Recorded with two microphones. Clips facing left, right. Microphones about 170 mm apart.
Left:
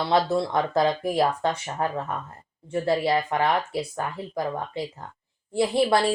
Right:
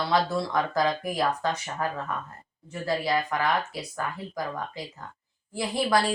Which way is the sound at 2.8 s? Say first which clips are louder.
Left 3 dB; 30° left (ahead or behind).